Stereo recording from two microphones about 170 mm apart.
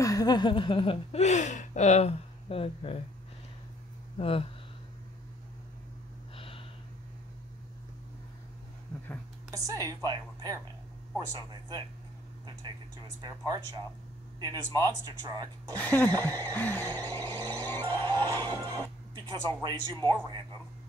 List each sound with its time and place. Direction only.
0.0 s speech: 20° left (ahead or behind)
4.2 s speech: 35° left (ahead or behind)
6.3 s snort: 30° left (ahead or behind)
9.5 s speech: 20° right (ahead or behind)
13.2 s speech: 25° right (ahead or behind)
15.7 s speech: 10° left (ahead or behind)
16.3 s speech: 20° right (ahead or behind)
16.5 s speech: 10° left (ahead or behind)
17.2 s speech: 25° right (ahead or behind)